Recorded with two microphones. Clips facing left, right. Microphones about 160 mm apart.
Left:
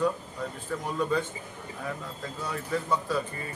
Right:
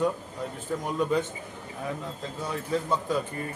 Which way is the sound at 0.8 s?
20° right (ahead or behind).